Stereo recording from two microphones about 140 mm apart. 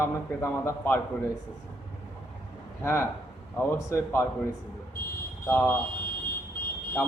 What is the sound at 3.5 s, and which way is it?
Speech, 20° left (ahead or behind).